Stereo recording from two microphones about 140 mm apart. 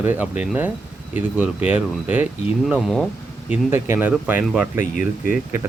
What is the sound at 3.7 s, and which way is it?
Speech, 15° right (ahead or behind).